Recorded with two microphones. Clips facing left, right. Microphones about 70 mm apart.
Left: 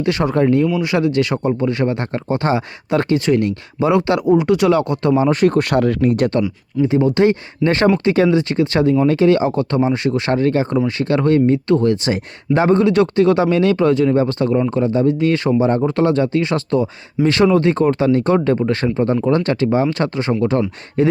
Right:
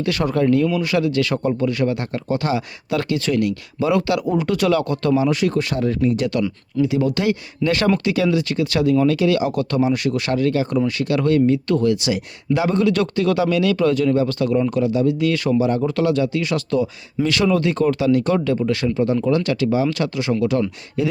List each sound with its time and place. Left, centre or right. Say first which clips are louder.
0.0 s speech: left 3 dB; left
5.1 s speech: left 5 dB; left
6.8 s speech: left 6 dB; left